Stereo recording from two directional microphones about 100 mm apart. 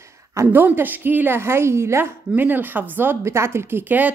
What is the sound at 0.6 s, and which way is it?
A woman's voice, 20° right (ahead or behind).